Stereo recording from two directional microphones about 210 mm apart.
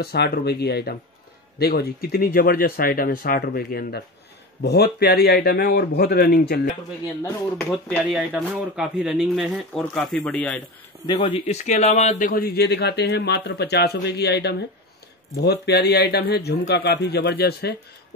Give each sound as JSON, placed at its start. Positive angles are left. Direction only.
{"t": 0.0, "sound": "a man's voice", "side_deg": 50}
{"t": 7.5, "sound": "speech", "side_deg": 0}
{"t": 11.1, "sound": "a man's voice", "side_deg": 25}